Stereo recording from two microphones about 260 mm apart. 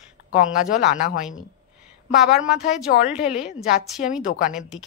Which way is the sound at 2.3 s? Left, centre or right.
Centre.